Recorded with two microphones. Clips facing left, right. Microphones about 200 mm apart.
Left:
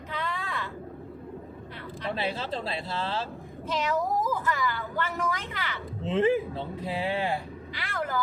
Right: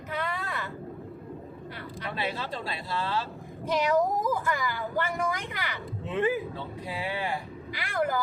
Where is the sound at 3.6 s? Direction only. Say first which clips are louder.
Right 4 dB; 15° right (ahead or behind).